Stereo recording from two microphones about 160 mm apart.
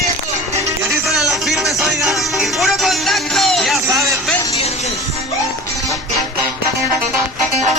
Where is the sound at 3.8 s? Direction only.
20° right (ahead or behind).